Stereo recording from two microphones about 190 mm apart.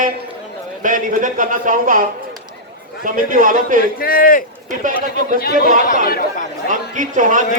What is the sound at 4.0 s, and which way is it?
Speech, 50° left (ahead or behind).